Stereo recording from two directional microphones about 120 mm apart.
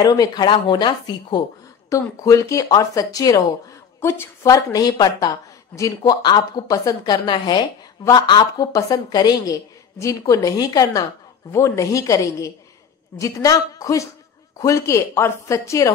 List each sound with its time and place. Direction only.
0.0 s a woman's voice: 35° left (ahead or behind)
1.9 s a woman's voice: 30° left (ahead or behind)